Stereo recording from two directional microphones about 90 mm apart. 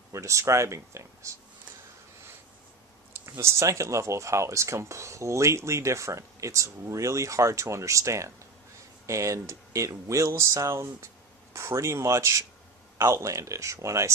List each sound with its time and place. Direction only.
0.1 s speech: 35° right (ahead or behind)
3.3 s speech: 30° right (ahead or behind)